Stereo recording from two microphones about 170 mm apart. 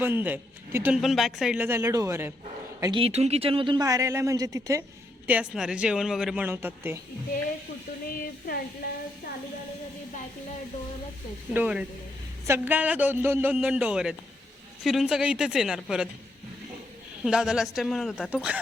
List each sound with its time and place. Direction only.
0.0 s speech: 10° right (ahead or behind)
1.0 s speech: centre (ahead or behind)
2.8 s a man's voice: 30° right (ahead or behind)
5.2 s speech: 5° right (ahead or behind)
8.0 s speech: 55° left (ahead or behind)
11.5 s speech: 10° right (ahead or behind)
17.2 s speech: 5° right (ahead or behind)